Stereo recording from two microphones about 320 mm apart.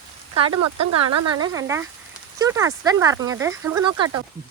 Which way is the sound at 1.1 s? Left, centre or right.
Right.